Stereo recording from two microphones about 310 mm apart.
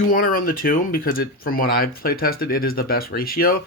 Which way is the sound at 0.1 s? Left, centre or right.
Left.